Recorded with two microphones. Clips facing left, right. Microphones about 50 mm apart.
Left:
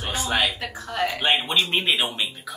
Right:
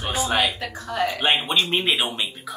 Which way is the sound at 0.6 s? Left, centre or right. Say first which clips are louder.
Right 2 dB; centre.